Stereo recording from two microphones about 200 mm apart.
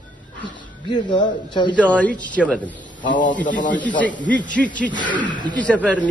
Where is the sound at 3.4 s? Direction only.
40° left (ahead or behind).